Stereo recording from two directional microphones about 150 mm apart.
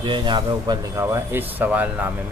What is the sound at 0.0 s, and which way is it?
Speech, 30° right (ahead or behind).